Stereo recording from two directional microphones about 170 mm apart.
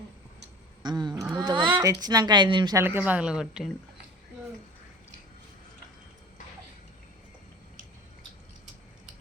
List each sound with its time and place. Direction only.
0.8 s a sound: 25° right (ahead or behind)
1.4 s speech: 25° right (ahead or behind)
2.8 s a woman's voice: 10° right (ahead or behind)